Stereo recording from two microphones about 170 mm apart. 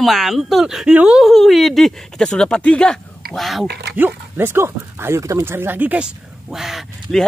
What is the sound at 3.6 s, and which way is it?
Speech, 70° right (ahead or behind).